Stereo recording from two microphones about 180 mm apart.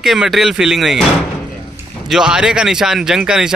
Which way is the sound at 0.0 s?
Centre (ahead or behind).